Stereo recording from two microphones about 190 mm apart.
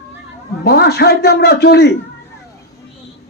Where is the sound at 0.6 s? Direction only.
60° left (ahead or behind).